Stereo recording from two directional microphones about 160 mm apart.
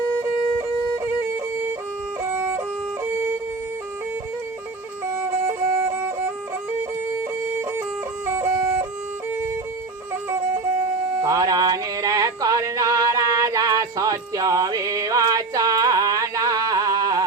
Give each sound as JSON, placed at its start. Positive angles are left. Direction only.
{"t": 0.9, "sound": "music", "side_deg": -15}
{"t": 5.1, "sound": "music", "side_deg": -15}
{"t": 11.1, "sound": "music", "side_deg": -20}